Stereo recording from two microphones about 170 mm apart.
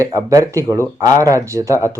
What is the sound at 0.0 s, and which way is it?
Speech, 20° right (ahead or behind).